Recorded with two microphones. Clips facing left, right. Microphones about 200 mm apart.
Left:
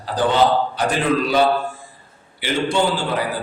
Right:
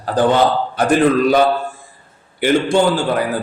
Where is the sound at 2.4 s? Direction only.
50° right (ahead or behind).